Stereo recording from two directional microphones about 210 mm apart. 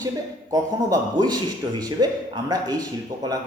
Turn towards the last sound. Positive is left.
turn(degrees=-20)  # may be behind; listen again after turning